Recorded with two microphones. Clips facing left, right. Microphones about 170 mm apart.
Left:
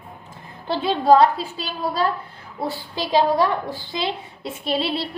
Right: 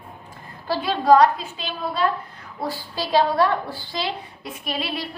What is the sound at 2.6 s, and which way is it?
A woman's voice, 25° left (ahead or behind).